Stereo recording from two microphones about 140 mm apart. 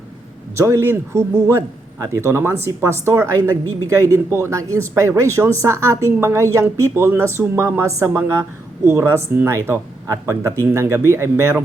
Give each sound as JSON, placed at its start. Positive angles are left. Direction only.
{"t": 0.5, "sound": "speech", "side_deg": -20}